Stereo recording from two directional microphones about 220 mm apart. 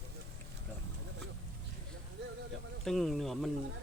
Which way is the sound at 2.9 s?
Centre (ahead or behind).